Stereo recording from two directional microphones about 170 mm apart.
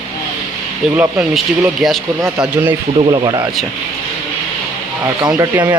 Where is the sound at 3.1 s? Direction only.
25° right (ahead or behind).